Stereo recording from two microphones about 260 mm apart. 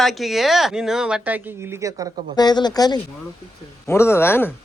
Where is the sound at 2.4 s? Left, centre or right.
Centre.